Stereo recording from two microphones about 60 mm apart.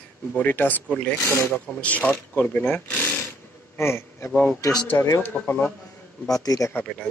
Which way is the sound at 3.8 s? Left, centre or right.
Left.